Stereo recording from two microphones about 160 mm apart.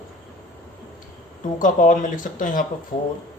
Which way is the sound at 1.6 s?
55° left (ahead or behind).